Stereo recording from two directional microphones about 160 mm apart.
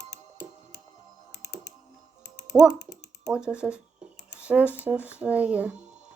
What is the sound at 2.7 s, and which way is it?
Typing, 90° left.